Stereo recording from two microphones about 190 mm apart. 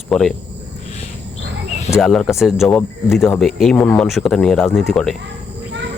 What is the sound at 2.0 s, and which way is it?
Speech, centre (ahead or behind).